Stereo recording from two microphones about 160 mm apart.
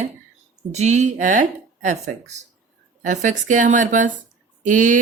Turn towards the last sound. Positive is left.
turn(degrees=-55)  # may be behind; listen again after turning